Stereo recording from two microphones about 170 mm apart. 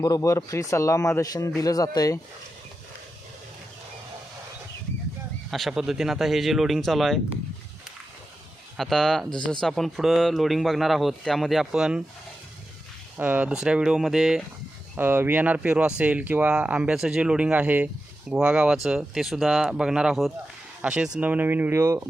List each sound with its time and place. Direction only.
0.0 s speech: 20° left (ahead or behind)
5.5 s speech: centre (ahead or behind)
8.8 s speech: centre (ahead or behind)
13.1 s speech: 10° right (ahead or behind)